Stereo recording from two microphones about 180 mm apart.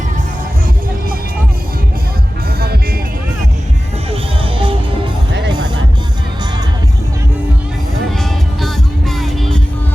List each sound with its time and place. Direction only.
4.1 s music: 30° right (ahead or behind)
8.1 s music: centre (ahead or behind)